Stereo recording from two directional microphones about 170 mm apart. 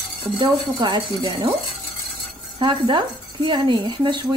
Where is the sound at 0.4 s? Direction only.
25° right (ahead or behind).